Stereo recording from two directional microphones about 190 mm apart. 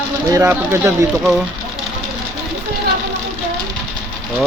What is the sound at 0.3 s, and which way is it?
Speech, 15° right (ahead or behind).